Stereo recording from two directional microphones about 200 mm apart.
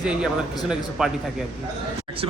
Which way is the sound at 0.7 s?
Centre (ahead or behind).